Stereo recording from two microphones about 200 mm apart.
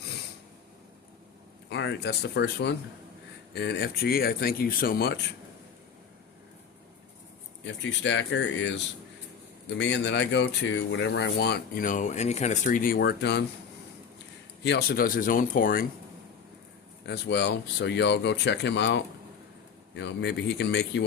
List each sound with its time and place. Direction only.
1.7 s speech: 60° left (ahead or behind)
7.6 s speech: 65° left (ahead or behind)
14.6 s speech: 55° left (ahead or behind)
17.1 s speech: 60° left (ahead or behind)